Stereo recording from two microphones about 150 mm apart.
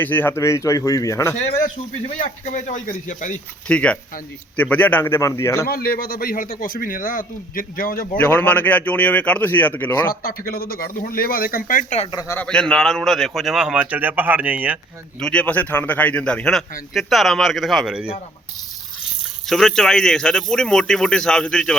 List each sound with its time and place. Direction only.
0.0 s speech: 15° left (ahead or behind)
2.1 s speech: 55° left (ahead or behind)
3.7 s speech: 10° left (ahead or behind)
5.6 s speech: 80° left
8.2 s speech: 10° left (ahead or behind)
10.1 s speech: 80° left; by 11.9 s 60° left (ahead or behind)
12.4 s a man's voice: 5° left (ahead or behind)
15.2 s a man's voice: 10° left (ahead or behind)
19.5 s a man's voice: centre (ahead or behind)